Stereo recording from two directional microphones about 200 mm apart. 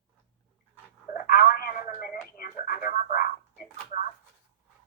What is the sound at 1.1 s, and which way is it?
Telephone, 45° left (ahead or behind).